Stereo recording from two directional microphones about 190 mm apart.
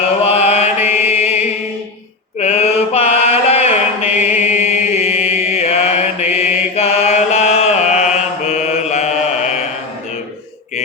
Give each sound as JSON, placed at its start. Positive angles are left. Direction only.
{"t": 0.3, "sound": "mantra", "side_deg": 35}
{"t": 4.3, "sound": "chant", "side_deg": 40}
{"t": 6.7, "sound": "mantra", "side_deg": 35}